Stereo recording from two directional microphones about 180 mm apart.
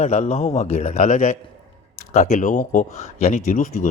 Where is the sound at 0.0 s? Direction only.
40° left (ahead or behind).